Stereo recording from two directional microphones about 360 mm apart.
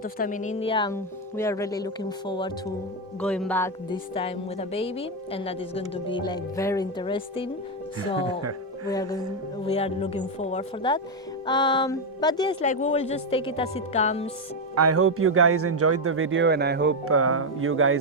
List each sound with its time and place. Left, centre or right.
0.0 s a woman's voice: left
8.2 s speech: right
8.9 s a woman's voice: centre
14.8 s a man's voice: right